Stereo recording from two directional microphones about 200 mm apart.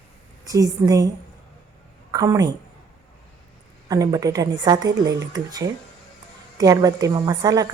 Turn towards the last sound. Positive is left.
turn(degrees=-20)  # may be behind; listen again after turning